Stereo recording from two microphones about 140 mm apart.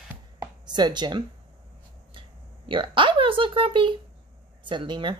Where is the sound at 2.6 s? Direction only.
35° right (ahead or behind).